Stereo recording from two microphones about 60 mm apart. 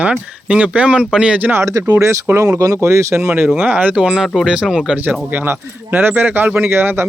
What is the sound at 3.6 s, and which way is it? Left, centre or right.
Speech, right.